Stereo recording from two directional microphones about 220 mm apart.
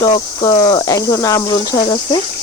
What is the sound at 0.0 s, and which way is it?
Cricket, 15° left (ahead or behind).